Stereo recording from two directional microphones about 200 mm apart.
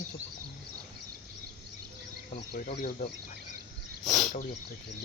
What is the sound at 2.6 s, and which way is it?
Speech, 35° left (ahead or behind).